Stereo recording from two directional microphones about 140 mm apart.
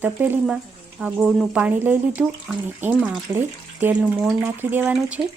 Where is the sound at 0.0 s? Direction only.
15° right (ahead or behind).